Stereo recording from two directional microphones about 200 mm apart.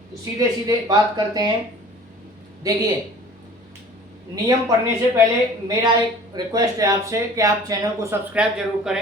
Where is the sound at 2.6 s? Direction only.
20° right (ahead or behind).